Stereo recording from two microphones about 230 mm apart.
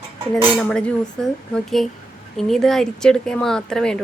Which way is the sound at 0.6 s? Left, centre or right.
Centre.